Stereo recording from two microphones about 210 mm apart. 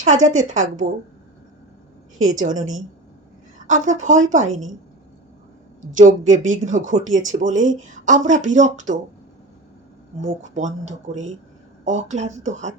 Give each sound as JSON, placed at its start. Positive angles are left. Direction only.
{"t": 0.0, "sound": "speech", "side_deg": -35}
{"t": 2.3, "sound": "speech", "side_deg": -35}
{"t": 3.7, "sound": "speech", "side_deg": -35}
{"t": 6.0, "sound": "speech", "side_deg": -35}
{"t": 10.2, "sound": "speech", "side_deg": -35}